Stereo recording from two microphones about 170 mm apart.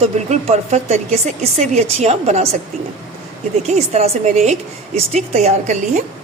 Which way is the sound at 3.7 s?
40° right (ahead or behind).